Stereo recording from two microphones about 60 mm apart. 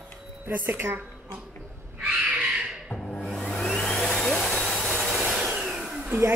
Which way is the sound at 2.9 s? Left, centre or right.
Centre.